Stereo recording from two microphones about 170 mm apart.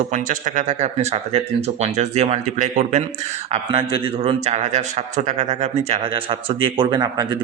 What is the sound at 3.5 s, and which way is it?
Speech, 30° right (ahead or behind).